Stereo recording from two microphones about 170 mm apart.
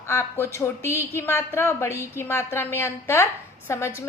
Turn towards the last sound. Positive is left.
turn(degrees=15)  # may be behind; listen again after turning